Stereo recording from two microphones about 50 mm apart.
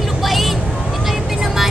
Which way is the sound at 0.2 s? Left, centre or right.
Centre.